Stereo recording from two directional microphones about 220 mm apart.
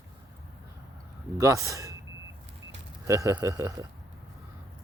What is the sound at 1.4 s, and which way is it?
Speech, 15° right (ahead or behind).